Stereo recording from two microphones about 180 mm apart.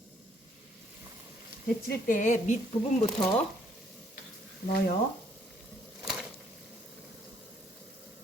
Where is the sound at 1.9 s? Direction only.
50° left (ahead or behind).